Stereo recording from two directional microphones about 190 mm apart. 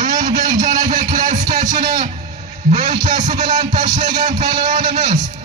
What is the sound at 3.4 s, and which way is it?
Speech, 40° right (ahead or behind).